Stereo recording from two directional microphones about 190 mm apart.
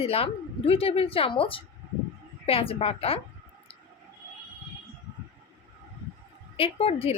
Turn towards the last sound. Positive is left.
turn(degrees=30)  # may be behind; listen again after turning